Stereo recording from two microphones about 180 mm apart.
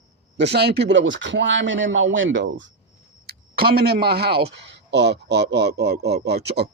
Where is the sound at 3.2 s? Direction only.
60° right (ahead or behind).